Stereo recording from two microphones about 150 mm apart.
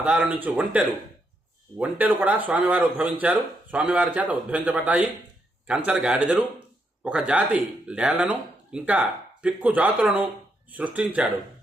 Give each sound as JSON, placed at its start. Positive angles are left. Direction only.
{"t": 0.0, "sound": "speech", "side_deg": -10}
{"t": 1.8, "sound": "speech", "side_deg": -10}